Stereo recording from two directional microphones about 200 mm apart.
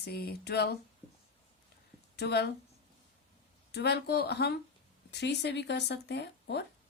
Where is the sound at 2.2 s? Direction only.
55° left (ahead or behind).